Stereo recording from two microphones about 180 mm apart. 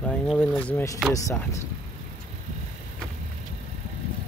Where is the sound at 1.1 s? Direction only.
20° left (ahead or behind).